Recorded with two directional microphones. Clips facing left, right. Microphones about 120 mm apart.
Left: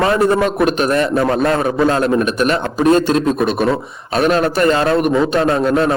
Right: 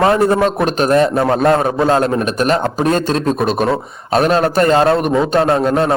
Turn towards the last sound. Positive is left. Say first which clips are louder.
# right 1 dB
turn(degrees=-40)  # may be behind; listen again after turning